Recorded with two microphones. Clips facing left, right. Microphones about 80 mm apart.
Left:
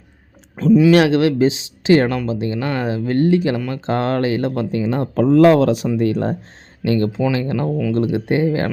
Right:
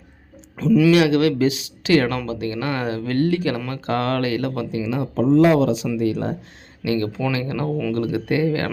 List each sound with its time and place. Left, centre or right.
0.9 s speech: left
4.7 s speech: left
6.0 s speech: left